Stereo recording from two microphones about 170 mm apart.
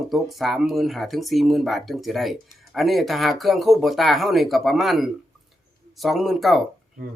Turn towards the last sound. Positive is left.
turn(degrees=0)  # may be behind; listen again after turning